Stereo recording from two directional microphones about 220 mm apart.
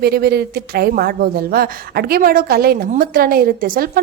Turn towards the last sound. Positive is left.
turn(degrees=-40)  # may be behind; listen again after turning